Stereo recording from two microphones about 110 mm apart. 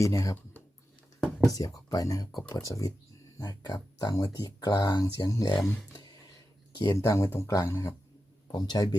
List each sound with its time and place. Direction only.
0.0 s speech: 30° left (ahead or behind)
1.5 s speech: 35° left (ahead or behind)
6.2 s a sound: 40° left (ahead or behind)
6.9 s speech: 30° left (ahead or behind)
8.5 s speech: 35° left (ahead or behind)